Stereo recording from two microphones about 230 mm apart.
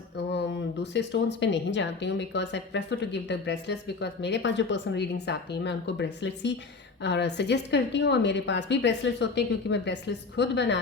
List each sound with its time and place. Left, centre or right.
0.3 s speech: left